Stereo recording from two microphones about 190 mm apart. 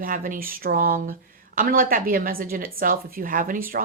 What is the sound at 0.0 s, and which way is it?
Speech, 45° right (ahead or behind).